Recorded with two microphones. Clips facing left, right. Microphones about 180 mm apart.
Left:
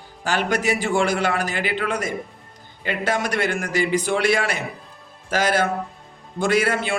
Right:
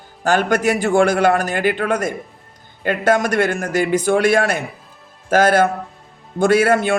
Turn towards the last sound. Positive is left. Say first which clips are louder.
# right 6 dB
turn(degrees=-50)  # may be behind; listen again after turning